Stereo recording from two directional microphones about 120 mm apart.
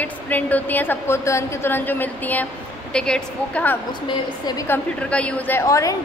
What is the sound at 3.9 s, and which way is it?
Speech, 35° left (ahead or behind).